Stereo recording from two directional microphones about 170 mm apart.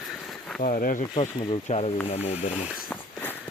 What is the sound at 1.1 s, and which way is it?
Speech, 35° left (ahead or behind).